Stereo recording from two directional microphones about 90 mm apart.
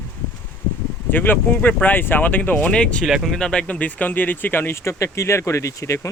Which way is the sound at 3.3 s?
10° left (ahead or behind).